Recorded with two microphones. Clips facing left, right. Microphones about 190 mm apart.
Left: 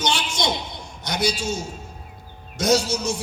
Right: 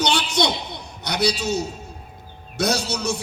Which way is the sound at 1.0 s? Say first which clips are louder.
Right 2 dB; 65° right (ahead or behind).